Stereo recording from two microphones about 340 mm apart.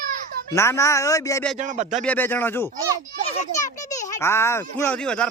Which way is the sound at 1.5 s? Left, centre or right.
Right.